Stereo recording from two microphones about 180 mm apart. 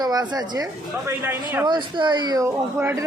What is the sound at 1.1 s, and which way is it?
Speech, 10° right (ahead or behind).